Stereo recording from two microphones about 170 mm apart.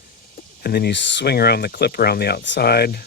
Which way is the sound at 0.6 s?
70° left (ahead or behind).